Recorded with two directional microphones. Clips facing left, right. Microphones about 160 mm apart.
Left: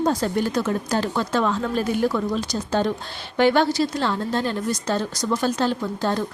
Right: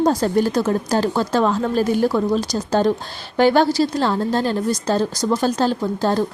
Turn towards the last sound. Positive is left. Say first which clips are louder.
# right 5 dB
turn(degrees=-35)  # may be behind; listen again after turning